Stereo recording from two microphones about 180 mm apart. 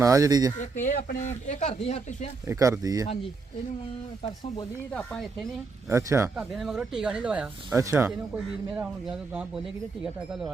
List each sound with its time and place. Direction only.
0.0 s speech: 15° right (ahead or behind)
0.6 s speech: 45° left (ahead or behind)
2.5 s speech: 20° right (ahead or behind)
4.9 s speech: 5° left (ahead or behind)
5.9 s speech: 15° right (ahead or behind)
6.3 s speech: centre (ahead or behind)